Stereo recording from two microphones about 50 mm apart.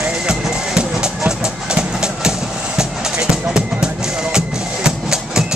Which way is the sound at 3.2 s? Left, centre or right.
Centre.